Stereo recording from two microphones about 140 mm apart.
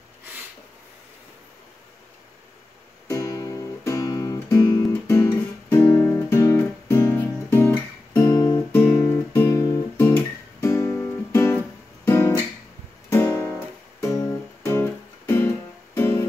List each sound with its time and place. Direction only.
3.1 s music: 25° left (ahead or behind)
9.3 s guitar: 15° left (ahead or behind)
10.6 s music: 20° left (ahead or behind)
12.1 s guitar: 15° left (ahead or behind)
14.0 s music: 20° left (ahead or behind)